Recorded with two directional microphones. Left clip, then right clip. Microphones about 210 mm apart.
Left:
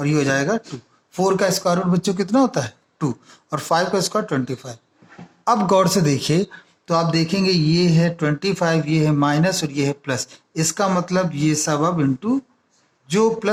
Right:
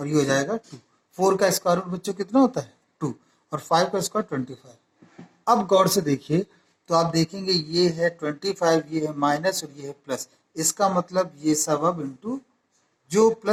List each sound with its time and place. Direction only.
0.0 s speech: 30° left (ahead or behind)